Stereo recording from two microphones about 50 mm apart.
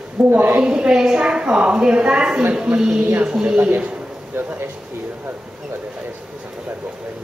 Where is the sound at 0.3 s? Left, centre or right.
Right.